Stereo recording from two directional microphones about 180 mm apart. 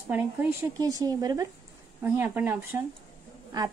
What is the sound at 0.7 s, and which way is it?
A woman's voice, 20° right (ahead or behind).